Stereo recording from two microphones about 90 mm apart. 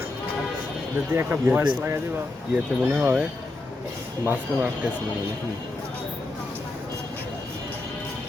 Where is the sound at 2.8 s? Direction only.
20° right (ahead or behind).